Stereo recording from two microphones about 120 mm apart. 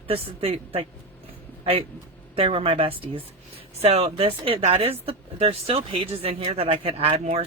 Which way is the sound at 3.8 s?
60° right (ahead or behind).